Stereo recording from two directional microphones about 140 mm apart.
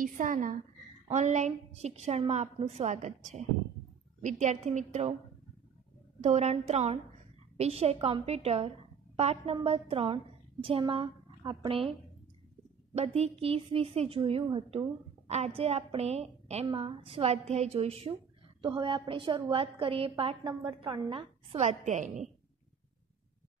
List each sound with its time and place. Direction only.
0.0 s a woman's voice: 70° right (ahead or behind)
1.1 s a woman's voice: 55° right (ahead or behind)
6.2 s a woman's voice: 50° right (ahead or behind)
12.9 s a woman's voice: 50° right (ahead or behind)
15.2 s a woman's voice: 50° right (ahead or behind)
16.6 s a woman's voice: 35° right (ahead or behind)
21.5 s a woman's voice: 55° right (ahead or behind)